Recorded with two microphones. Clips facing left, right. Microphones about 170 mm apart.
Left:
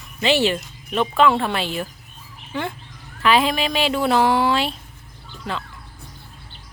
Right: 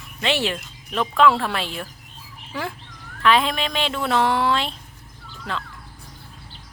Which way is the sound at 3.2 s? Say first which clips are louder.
Left 1 dB; 5° left (ahead or behind).